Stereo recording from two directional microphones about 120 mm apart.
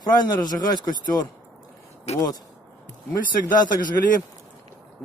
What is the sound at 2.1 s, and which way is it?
Speech, 65° left (ahead or behind).